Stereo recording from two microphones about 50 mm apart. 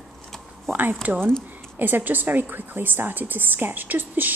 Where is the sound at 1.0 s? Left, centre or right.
Right.